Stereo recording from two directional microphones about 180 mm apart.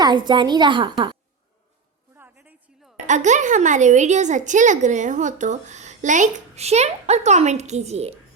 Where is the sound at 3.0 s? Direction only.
40° right (ahead or behind).